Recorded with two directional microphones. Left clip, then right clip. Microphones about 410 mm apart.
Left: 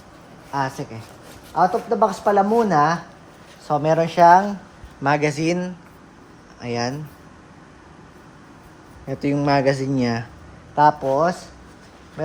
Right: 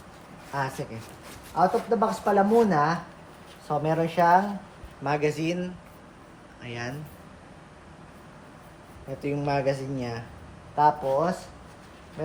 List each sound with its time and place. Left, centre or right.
0.5 s speech: centre
9.2 s speech: centre